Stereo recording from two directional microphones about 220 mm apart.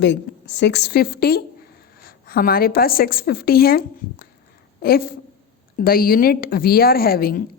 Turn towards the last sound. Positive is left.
turn(degrees=40)  # may be behind; listen again after turning